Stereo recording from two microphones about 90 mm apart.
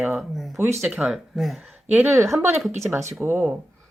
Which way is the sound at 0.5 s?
30° right (ahead or behind).